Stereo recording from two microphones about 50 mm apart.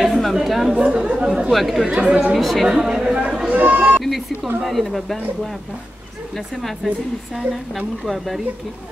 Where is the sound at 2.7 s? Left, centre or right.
Centre.